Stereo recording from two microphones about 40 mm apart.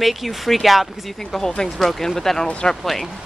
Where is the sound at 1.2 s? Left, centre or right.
Centre.